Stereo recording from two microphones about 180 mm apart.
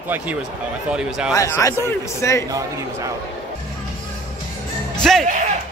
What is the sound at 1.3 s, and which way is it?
Speech, 15° left (ahead or behind).